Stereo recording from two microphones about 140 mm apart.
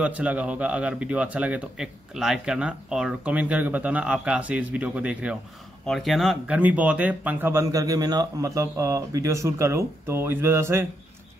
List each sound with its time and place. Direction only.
0.0 s speech: 10° right (ahead or behind)